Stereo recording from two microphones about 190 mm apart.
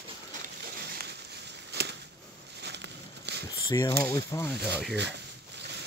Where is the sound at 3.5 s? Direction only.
20° left (ahead or behind).